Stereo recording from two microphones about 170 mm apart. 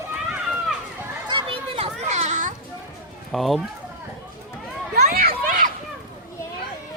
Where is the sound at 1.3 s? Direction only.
30° right (ahead or behind).